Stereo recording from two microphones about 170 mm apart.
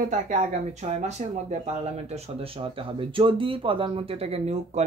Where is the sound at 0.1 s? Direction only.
45° right (ahead or behind).